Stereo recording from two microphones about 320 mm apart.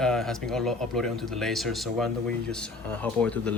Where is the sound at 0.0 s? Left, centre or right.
Centre.